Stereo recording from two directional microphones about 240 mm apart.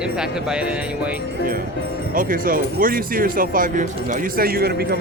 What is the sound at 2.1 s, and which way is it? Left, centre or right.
Speech, right.